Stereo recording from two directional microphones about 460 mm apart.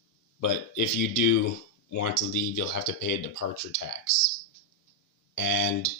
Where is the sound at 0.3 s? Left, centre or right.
Left.